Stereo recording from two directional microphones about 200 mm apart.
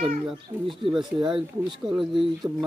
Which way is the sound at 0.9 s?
25° right (ahead or behind).